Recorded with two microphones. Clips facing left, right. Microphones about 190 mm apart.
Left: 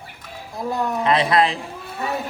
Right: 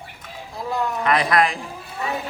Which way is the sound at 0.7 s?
25° left (ahead or behind).